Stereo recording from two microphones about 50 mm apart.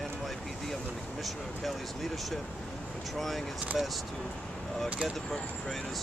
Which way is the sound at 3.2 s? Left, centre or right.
Centre.